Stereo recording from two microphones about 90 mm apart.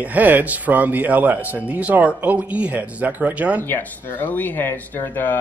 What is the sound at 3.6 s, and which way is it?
Speech, 25° left (ahead or behind).